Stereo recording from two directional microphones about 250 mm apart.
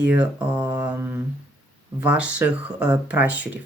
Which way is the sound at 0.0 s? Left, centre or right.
Centre.